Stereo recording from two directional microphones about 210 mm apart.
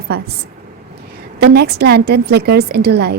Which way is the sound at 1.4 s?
50° right (ahead or behind).